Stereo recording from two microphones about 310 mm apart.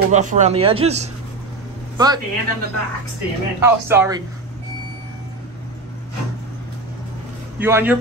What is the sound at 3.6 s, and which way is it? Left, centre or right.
Speech, centre.